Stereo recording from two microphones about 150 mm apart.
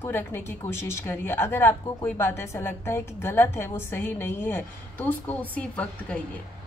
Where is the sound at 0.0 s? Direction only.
15° left (ahead or behind).